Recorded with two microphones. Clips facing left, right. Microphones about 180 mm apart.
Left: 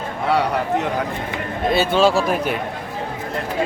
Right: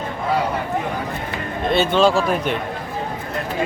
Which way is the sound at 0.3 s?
70° left (ahead or behind).